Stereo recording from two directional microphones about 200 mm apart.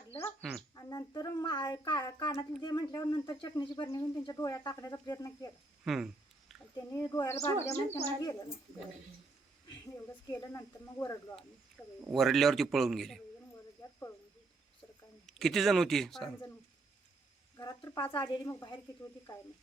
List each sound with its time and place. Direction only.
0.8 s a sound: 20° left (ahead or behind)
2.6 s speech: 20° left (ahead or behind)
5.8 s speech: centre (ahead or behind)
6.7 s speech: 20° left (ahead or behind)
10.1 s speech: 15° left (ahead or behind)
12.0 s a man's voice: centre (ahead or behind)
15.3 s a man's voice: centre (ahead or behind)
17.6 s speech: 20° left (ahead or behind)